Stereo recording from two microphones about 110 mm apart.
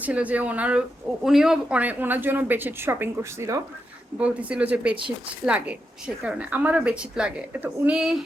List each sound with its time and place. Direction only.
0.0 s speech: 15° right (ahead or behind)
4.2 s speech: 10° right (ahead or behind)